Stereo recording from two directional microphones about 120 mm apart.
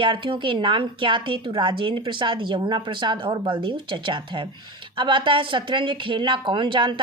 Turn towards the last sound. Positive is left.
turn(degrees=-40)  # may be behind; listen again after turning